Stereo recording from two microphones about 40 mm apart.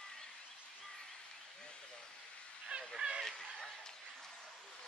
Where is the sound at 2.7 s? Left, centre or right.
Right.